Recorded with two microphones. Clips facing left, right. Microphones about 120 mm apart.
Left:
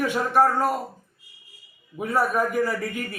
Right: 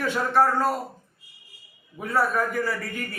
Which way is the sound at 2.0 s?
15° left (ahead or behind).